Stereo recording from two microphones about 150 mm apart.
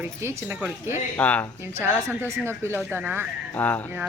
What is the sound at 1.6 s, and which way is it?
A woman's voice, 15° right (ahead or behind).